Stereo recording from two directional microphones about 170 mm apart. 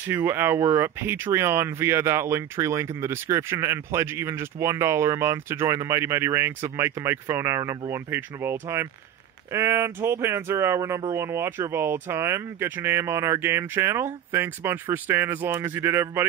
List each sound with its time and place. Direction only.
0.0 s speech: 15° right (ahead or behind)